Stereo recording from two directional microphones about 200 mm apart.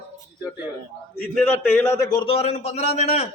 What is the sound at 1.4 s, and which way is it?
A man's voice, 10° left (ahead or behind).